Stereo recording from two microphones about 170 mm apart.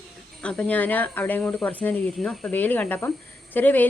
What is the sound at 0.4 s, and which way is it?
Speech, 10° left (ahead or behind).